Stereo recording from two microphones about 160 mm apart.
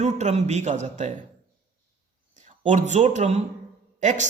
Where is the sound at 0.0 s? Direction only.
45° right (ahead or behind).